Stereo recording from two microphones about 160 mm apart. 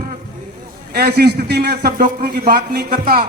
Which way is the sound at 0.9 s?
80° right.